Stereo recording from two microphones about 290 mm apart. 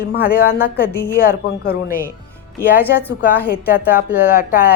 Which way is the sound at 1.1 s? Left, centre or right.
Left.